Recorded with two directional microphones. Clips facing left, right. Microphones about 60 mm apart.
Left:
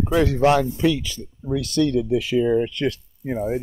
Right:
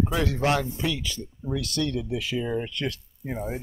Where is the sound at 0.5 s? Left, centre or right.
Left.